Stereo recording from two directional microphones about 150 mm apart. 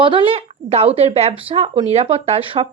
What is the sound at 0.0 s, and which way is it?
Speech, 35° right (ahead or behind).